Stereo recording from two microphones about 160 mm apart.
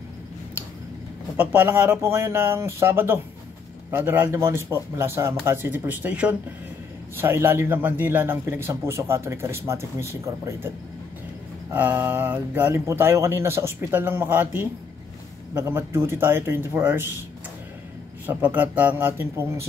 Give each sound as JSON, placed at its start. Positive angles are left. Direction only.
{"t": 1.3, "sound": "a man's voice", "side_deg": -15}
{"t": 11.7, "sound": "a man's voice", "side_deg": -10}
{"t": 18.2, "sound": "a man's voice", "side_deg": -10}